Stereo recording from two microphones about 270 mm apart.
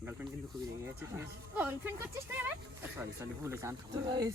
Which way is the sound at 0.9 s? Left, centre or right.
Centre.